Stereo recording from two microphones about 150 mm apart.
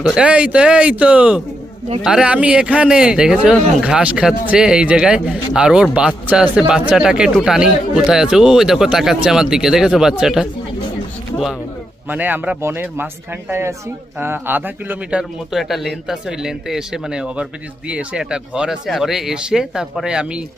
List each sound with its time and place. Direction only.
0.0 s a man's voice: 5° right (ahead or behind)
12.0 s a man's voice: 10° right (ahead or behind)